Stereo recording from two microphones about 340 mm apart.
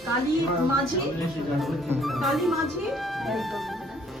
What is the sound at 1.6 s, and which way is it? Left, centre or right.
Speech, centre.